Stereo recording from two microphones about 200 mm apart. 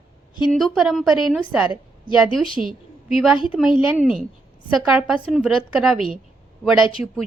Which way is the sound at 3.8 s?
5° right (ahead or behind).